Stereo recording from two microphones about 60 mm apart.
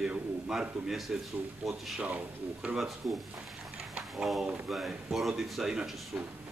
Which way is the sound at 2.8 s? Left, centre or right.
Centre.